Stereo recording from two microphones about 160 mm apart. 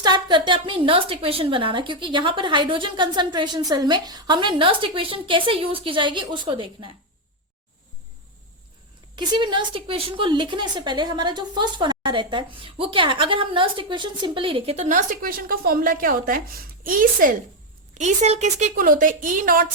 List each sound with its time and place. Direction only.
0.0 s a woman's voice: 30° right (ahead or behind)
9.1 s a woman's voice: 30° right (ahead or behind)
14.8 s a woman's voice: 55° right (ahead or behind)
17.9 s a woman's voice: 45° right (ahead or behind)